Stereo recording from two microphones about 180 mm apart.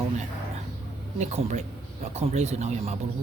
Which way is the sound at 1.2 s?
40° right (ahead or behind).